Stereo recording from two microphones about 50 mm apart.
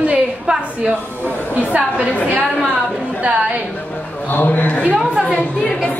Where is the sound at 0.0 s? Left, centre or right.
Right.